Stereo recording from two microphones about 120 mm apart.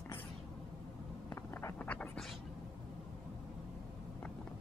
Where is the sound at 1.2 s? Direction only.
15° left (ahead or behind).